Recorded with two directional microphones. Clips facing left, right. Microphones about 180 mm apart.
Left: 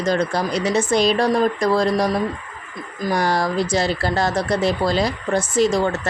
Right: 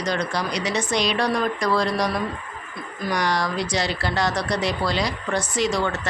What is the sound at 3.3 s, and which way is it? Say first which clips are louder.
Speech: left 4 dB; 50° left (ahead or behind).